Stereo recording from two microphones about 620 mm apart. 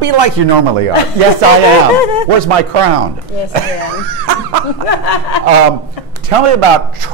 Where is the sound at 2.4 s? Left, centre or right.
Right.